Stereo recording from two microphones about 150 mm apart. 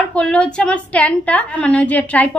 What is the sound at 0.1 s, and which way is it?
A woman's voice, 5° left (ahead or behind).